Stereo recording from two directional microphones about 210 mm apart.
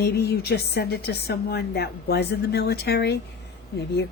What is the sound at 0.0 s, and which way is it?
A woman's voice, 50° left (ahead or behind).